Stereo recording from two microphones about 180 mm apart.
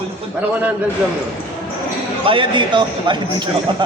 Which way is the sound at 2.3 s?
25° right (ahead or behind).